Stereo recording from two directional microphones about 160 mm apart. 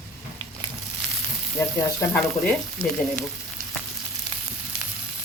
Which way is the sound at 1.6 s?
15° left (ahead or behind).